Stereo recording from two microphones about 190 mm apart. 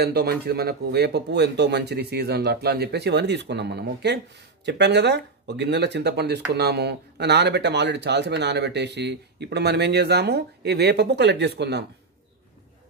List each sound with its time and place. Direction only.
0.0 s speech: 55° right (ahead or behind)